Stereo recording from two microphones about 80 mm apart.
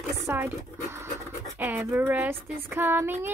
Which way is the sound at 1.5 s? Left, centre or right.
Right.